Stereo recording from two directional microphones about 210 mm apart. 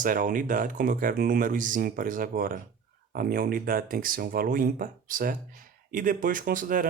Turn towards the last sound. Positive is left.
turn(degrees=-40)  # may be behind; listen again after turning